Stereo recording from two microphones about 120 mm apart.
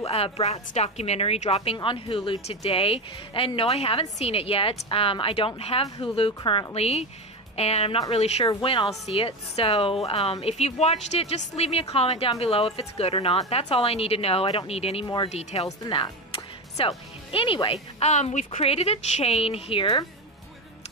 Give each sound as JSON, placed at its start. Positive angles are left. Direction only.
{"t": 0.0, "sound": "speech", "side_deg": 60}
{"t": 6.7, "sound": "speech", "side_deg": 60}
{"t": 8.5, "sound": "speech", "side_deg": 45}
{"t": 9.0, "sound": "speech", "side_deg": 60}
{"t": 15.9, "sound": "music", "side_deg": 45}
{"t": 17.9, "sound": "speech", "side_deg": 65}